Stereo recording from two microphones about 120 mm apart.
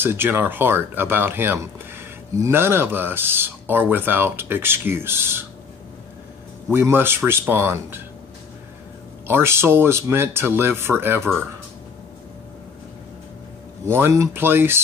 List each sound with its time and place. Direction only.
0.0 s speech: 20° right (ahead or behind)
6.7 s speech: 15° right (ahead or behind)
9.3 s speech: 20° right (ahead or behind)
13.8 s speech: 20° right (ahead or behind)